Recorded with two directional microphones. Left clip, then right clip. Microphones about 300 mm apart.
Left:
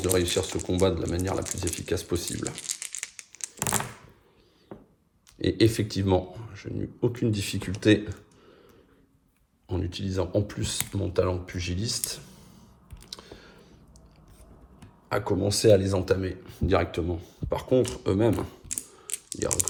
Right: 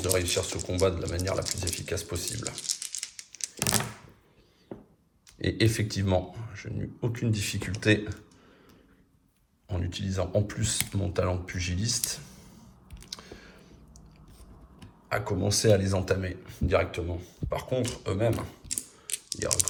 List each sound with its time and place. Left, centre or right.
0.0 s speech: centre
3.0 s a sound: centre
5.4 s speech: centre
9.6 s speech: centre
15.1 s speech: centre
19.0 s typing: centre